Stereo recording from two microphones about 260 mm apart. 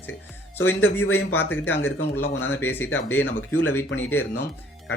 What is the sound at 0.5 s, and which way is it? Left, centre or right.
A man's voice, centre.